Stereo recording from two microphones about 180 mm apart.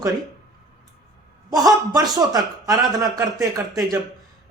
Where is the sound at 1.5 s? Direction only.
20° right (ahead or behind).